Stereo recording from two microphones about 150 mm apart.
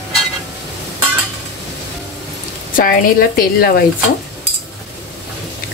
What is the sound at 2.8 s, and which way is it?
Speech, 75° left (ahead or behind).